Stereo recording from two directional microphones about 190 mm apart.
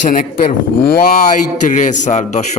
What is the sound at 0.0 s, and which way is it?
Speech, 45° left (ahead or behind).